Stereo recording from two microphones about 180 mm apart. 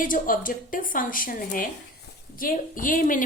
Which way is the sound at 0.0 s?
50° left (ahead or behind).